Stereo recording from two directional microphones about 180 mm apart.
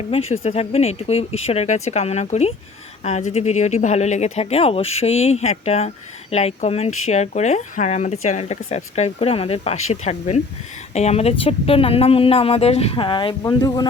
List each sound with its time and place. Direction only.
0.1 s speech: 35° left (ahead or behind)